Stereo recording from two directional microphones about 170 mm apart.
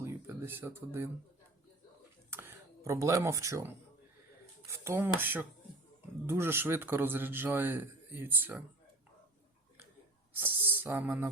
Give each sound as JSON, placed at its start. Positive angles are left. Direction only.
{"t": 0.0, "sound": "a sound", "side_deg": -15}
{"t": 2.3, "sound": "speech", "side_deg": -15}
{"t": 4.8, "sound": "a man's voice", "side_deg": -15}
{"t": 10.3, "sound": "speech", "side_deg": -10}